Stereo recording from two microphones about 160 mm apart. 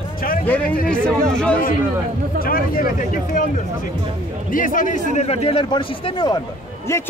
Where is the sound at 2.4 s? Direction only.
65° left (ahead or behind).